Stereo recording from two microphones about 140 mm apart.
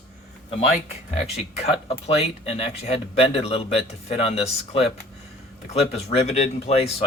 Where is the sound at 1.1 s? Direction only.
45° left (ahead or behind).